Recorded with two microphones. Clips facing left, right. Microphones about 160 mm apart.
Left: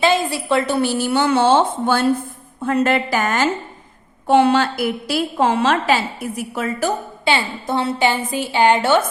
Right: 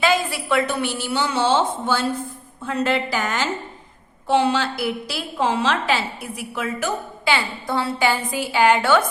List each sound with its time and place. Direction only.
0.0 s a woman's voice: 25° left (ahead or behind)